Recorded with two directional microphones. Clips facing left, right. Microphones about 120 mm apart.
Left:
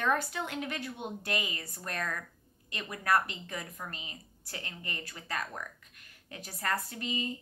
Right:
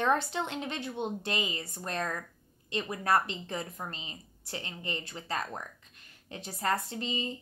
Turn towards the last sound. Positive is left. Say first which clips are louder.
# right 1 dB
turn(degrees=-25)  # may be behind; listen again after turning